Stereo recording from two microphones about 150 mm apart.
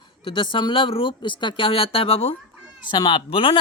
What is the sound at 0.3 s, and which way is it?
A child's voice, 35° left (ahead or behind).